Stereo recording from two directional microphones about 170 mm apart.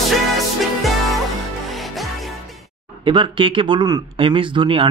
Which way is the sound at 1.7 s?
Centre (ahead or behind).